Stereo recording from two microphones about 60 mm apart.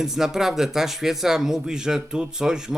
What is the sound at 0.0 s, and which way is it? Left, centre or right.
Speech, centre.